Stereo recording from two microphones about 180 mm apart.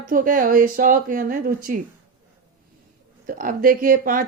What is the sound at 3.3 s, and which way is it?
Speech, 50° right (ahead or behind).